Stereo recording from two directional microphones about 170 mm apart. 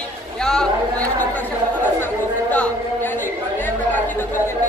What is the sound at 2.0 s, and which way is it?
Chatter, 10° left (ahead or behind).